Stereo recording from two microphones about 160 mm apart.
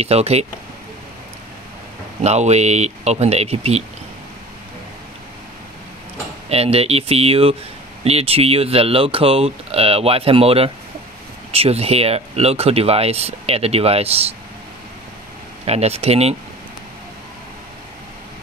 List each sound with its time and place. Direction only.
0.0 s speech: 40° right (ahead or behind)
2.2 s speech: 45° right (ahead or behind)
6.5 s speech: 40° right (ahead or behind)
15.6 s speech: 40° right (ahead or behind)